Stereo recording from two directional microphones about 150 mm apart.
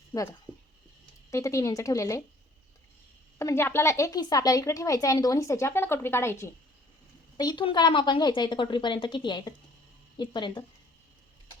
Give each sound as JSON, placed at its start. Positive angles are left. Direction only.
{"t": 0.1, "sound": "a woman's voice", "side_deg": 20}
{"t": 3.3, "sound": "a woman's voice", "side_deg": 20}
{"t": 7.3, "sound": "a woman's voice", "side_deg": 30}